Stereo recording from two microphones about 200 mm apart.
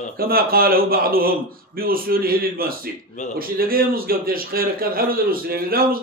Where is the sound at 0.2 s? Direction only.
50° right (ahead or behind).